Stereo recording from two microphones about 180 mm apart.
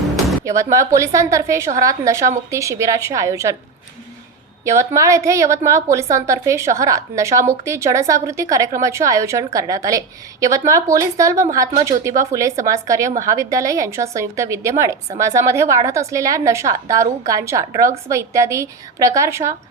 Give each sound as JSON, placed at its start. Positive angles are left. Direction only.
{"t": 0.4, "sound": "a woman's voice", "side_deg": -15}
{"t": 4.6, "sound": "a woman's voice", "side_deg": -15}